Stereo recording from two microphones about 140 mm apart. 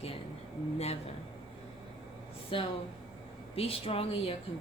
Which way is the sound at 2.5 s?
40° left (ahead or behind).